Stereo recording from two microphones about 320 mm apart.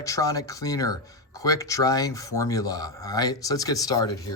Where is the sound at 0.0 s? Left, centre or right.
Centre.